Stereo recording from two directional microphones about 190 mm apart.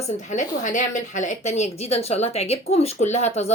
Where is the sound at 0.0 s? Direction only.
40° left (ahead or behind).